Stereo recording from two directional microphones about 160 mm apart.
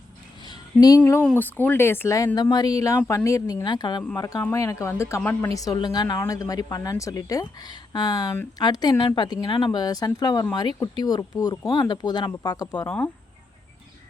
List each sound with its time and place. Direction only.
1.0 s speech: 10° left (ahead or behind)
5.5 s speech: 25° left (ahead or behind)